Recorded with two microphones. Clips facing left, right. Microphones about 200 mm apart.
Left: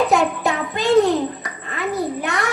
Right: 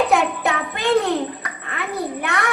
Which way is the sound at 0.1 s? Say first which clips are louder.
Left 1 dB; 60° right (ahead or behind).